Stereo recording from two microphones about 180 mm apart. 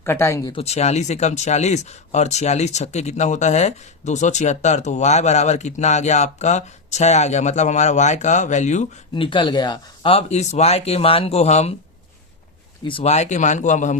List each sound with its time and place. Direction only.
0.0 s speech: 15° left (ahead or behind)
0.5 s speech: 35° left (ahead or behind)
9.1 s speech: 30° left (ahead or behind)
12.8 s speech: 30° left (ahead or behind)